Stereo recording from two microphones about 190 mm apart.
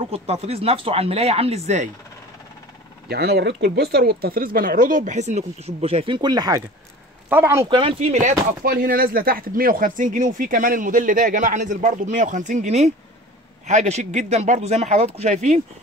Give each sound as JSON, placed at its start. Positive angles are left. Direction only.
{"t": 0.0, "sound": "speech", "side_deg": -35}
{"t": 3.1, "sound": "speech", "side_deg": -55}
{"t": 7.2, "sound": "speech", "side_deg": -10}
{"t": 7.6, "sound": "speech", "side_deg": -25}